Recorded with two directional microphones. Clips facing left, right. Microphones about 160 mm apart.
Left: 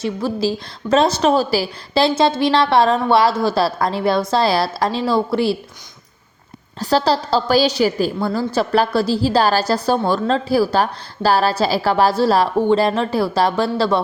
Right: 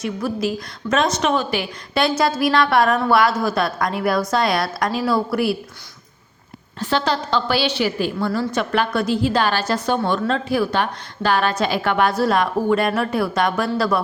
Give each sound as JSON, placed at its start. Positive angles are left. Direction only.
{"t": 0.0, "sound": "a woman's voice", "side_deg": 30}
{"t": 6.7, "sound": "a woman's voice", "side_deg": 35}